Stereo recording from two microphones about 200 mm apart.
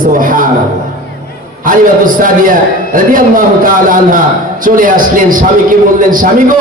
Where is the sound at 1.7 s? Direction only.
45° right (ahead or behind).